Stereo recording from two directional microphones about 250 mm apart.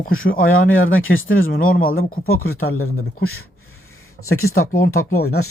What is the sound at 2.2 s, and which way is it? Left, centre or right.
Speech, left.